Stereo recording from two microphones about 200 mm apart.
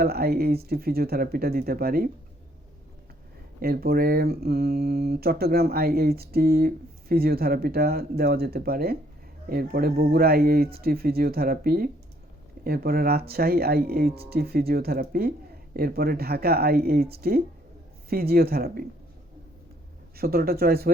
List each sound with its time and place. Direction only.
0.0 s speech: 50° right (ahead or behind)
3.6 s speech: 50° right (ahead or behind)
20.1 s speech: 50° right (ahead or behind)